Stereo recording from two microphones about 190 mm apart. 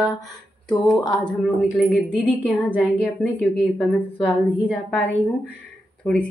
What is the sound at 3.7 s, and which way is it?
A woman's voice, 5° left (ahead or behind).